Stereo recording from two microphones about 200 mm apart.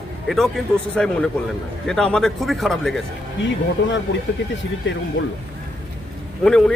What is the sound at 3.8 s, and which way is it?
Speech, 65° left (ahead or behind).